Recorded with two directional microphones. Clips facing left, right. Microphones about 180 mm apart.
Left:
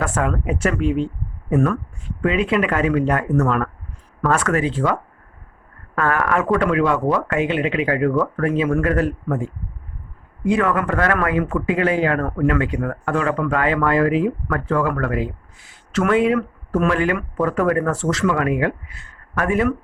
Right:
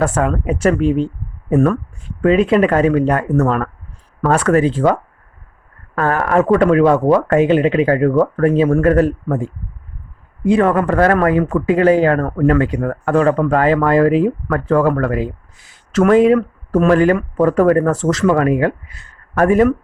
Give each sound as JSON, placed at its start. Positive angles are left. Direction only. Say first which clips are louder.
{"t": 0.0, "sound": "speech", "louder": "right 5 dB", "side_deg": -35}
{"t": 6.0, "sound": "speech", "louder": "right 5 dB", "side_deg": -30}